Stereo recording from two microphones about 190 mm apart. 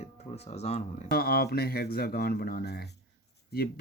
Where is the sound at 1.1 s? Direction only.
55° left (ahead or behind).